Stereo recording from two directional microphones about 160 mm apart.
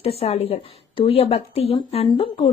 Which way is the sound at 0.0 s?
40° left (ahead or behind).